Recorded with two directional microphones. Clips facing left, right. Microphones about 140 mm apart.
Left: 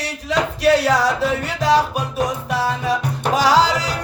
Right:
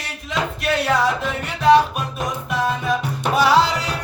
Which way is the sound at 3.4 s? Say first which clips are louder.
Even; 90° left.